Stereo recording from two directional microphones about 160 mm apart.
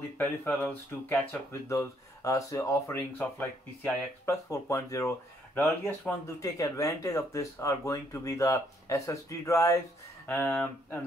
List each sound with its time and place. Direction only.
0.2 s speech: 10° left (ahead or behind)